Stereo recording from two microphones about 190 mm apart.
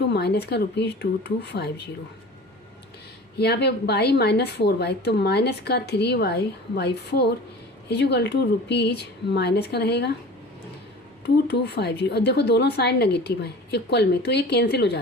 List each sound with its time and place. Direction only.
0.0 s a woman's voice: 60° left (ahead or behind)
3.3 s a woman's voice: 60° left (ahead or behind)
11.4 s a woman's voice: 60° left (ahead or behind)